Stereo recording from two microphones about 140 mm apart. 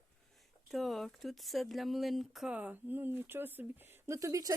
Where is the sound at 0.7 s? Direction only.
Centre (ahead or behind).